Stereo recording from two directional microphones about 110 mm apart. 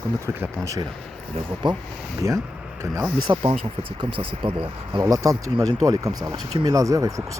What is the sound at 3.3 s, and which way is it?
Speech, 40° right (ahead or behind).